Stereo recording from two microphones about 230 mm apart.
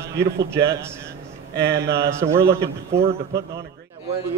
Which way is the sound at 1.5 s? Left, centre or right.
Right.